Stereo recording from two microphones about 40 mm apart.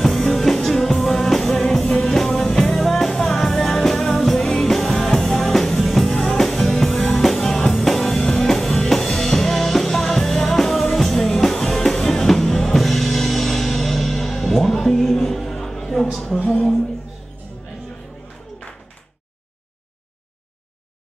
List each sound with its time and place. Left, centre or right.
0.3 s music: centre
8.2 s music: left
8.5 s music: centre
16.4 s a sound: centre